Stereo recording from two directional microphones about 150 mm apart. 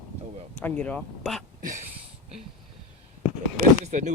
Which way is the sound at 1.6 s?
55° right (ahead or behind).